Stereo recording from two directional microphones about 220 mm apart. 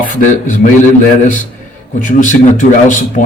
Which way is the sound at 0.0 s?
35° left (ahead or behind).